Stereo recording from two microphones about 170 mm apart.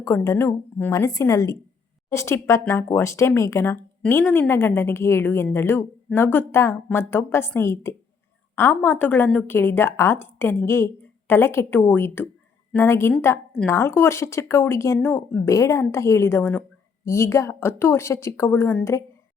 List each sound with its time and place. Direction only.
0.0 s speech: 15° left (ahead or behind)